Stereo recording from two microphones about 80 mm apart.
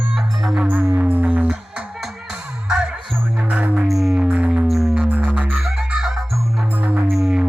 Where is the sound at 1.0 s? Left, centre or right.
Right.